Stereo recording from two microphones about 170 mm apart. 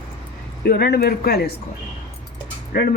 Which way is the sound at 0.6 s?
70° left (ahead or behind).